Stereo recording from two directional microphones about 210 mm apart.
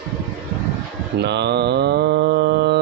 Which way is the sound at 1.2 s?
55° right (ahead or behind).